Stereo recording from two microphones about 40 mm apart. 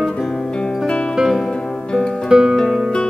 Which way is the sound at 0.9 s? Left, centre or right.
Left.